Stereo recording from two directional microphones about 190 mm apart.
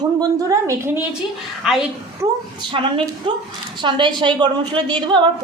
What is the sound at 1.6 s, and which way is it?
Speech, 5° right (ahead or behind).